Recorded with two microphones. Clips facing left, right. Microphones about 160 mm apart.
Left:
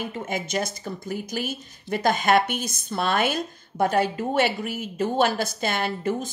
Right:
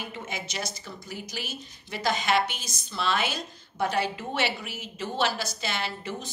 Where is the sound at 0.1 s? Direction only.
50° left (ahead or behind).